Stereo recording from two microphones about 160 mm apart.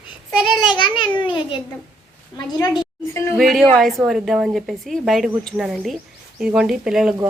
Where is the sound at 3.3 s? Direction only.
Centre (ahead or behind).